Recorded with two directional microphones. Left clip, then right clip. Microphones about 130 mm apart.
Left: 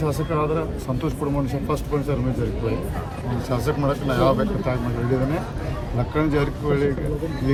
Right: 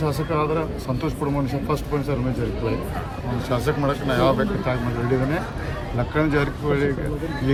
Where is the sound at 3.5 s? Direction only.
20° right (ahead or behind).